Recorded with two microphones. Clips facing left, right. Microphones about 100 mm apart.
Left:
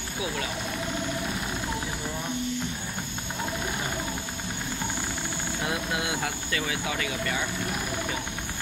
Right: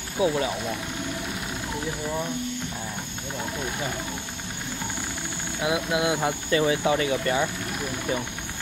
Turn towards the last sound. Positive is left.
turn(degrees=-30)  # may be behind; listen again after turning